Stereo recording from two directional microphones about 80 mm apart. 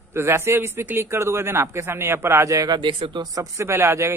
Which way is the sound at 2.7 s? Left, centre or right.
Right.